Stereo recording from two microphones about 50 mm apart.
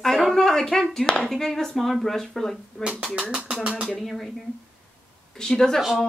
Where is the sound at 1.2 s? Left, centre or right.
Centre.